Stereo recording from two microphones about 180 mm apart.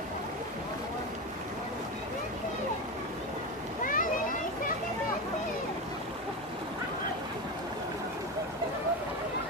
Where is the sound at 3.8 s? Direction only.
50° left (ahead or behind).